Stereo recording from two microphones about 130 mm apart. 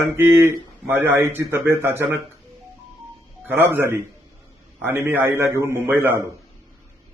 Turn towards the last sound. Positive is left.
turn(degrees=-15)  # may be behind; listen again after turning